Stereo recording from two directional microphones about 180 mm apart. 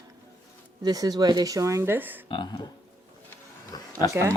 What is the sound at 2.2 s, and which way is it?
Speech, 25° left (ahead or behind).